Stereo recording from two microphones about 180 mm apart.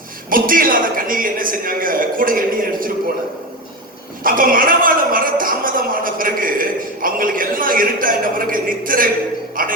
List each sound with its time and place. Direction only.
0.3 s a man's voice: 50° right (ahead or behind)
4.2 s a man's voice: 50° right (ahead or behind)
9.6 s music: 50° right (ahead or behind)